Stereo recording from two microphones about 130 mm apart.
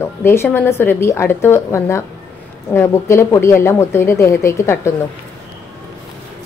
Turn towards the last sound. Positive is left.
turn(degrees=20)  # may be behind; listen again after turning